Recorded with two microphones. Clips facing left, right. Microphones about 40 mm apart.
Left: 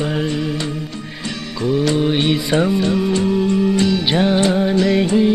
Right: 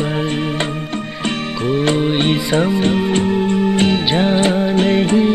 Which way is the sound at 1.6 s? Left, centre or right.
Right.